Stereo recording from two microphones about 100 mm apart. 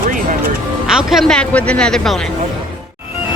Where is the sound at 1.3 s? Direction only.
10° left (ahead or behind).